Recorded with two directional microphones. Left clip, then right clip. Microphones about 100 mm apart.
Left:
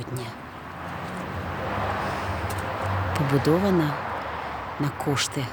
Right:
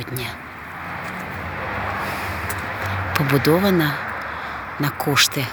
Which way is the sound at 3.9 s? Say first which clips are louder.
Right 4 dB; 40° left (ahead or behind).